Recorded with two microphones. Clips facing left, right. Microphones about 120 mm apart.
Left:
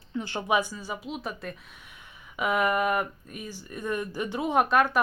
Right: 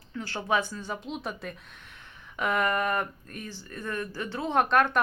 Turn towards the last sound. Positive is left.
turn(degrees=5)  # may be behind; listen again after turning